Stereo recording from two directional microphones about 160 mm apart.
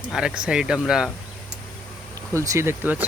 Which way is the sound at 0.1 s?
5° right (ahead or behind).